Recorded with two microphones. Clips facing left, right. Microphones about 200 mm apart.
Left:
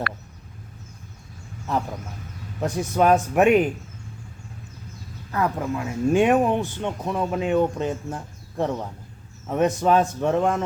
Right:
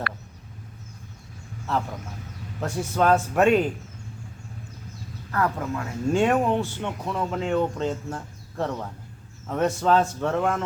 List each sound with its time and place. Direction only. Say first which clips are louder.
1.7 s speech: left 1 dB; 15° left (ahead or behind)
5.3 s speech: left 2 dB; 15° left (ahead or behind)